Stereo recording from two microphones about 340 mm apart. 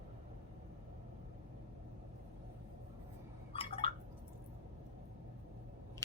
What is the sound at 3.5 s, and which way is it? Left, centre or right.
Drip, centre.